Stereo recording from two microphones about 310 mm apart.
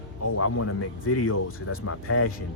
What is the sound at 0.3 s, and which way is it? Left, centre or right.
Speech, left.